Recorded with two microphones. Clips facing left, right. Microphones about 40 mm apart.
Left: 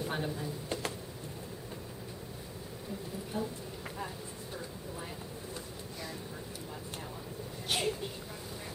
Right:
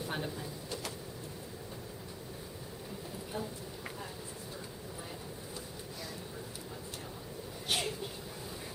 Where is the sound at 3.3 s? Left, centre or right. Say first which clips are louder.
Left 3 dB; centre.